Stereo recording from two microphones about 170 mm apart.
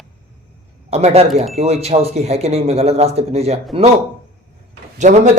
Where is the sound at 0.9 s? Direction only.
35° right (ahead or behind).